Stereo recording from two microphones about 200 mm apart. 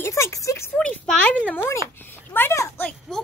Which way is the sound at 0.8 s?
5° left (ahead or behind).